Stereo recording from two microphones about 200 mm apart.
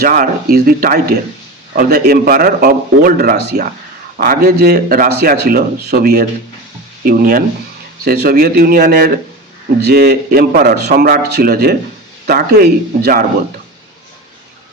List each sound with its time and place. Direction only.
0.0 s a man's voice: 45° right (ahead or behind)